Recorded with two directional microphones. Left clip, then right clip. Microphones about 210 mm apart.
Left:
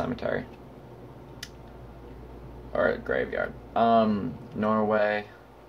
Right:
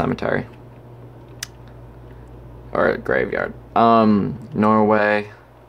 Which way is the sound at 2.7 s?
45° right (ahead or behind).